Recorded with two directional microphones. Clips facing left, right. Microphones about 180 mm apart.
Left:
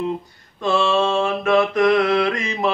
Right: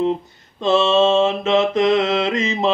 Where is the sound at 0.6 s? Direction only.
20° right (ahead or behind).